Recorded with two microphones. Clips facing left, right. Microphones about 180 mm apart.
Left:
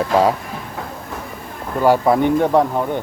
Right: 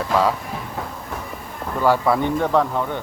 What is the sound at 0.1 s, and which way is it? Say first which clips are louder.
Speech: left 3 dB; 40° left (ahead or behind).